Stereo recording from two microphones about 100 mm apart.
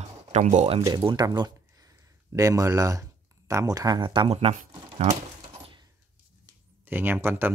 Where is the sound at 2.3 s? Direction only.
30° right (ahead or behind).